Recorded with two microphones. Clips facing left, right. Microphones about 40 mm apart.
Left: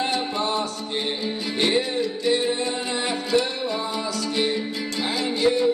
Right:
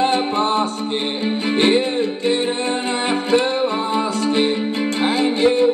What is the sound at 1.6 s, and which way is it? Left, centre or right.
Music, right.